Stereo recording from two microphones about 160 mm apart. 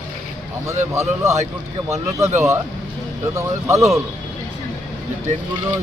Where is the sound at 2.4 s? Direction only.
15° right (ahead or behind).